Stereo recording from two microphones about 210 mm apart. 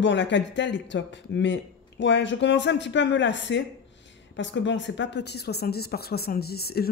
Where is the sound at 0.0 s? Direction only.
55° left (ahead or behind).